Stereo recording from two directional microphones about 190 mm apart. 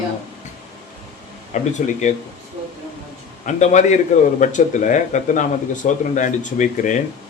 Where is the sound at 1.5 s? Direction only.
40° left (ahead or behind).